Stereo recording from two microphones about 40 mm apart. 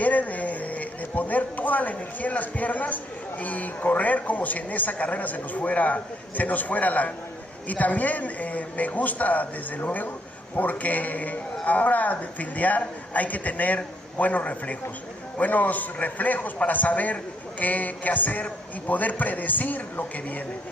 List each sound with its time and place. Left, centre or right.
0.0 s a man's voice: left